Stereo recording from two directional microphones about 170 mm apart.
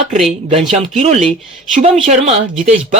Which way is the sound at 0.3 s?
40° right (ahead or behind).